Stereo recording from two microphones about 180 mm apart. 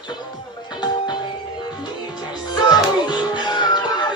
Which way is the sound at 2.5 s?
25° left (ahead or behind).